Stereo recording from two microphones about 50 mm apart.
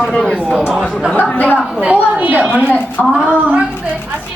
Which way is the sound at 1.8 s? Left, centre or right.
Right.